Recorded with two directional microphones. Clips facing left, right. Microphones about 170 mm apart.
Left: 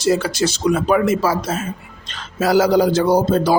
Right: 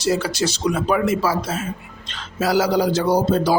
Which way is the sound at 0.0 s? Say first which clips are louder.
Left 3 dB; 55° left (ahead or behind).